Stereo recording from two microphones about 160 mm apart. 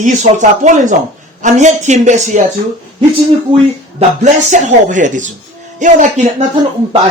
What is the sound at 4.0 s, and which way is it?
Speech, 50° right (ahead or behind).